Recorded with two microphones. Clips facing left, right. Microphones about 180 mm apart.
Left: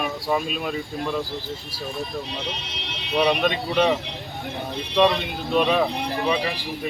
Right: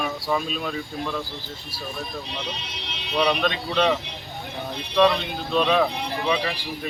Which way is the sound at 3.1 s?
5° left (ahead or behind).